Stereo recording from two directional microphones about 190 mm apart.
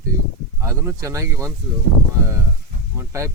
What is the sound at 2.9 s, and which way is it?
Speech, 15° right (ahead or behind).